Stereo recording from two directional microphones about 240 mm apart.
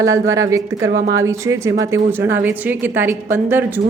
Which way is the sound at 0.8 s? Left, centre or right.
Right.